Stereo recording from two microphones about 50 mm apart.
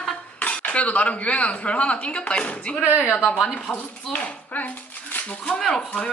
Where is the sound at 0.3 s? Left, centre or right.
Left.